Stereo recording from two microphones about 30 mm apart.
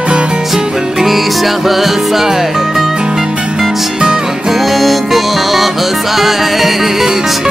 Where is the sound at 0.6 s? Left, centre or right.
Right.